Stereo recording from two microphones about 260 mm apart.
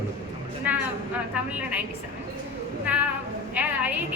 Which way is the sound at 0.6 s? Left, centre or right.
Centre.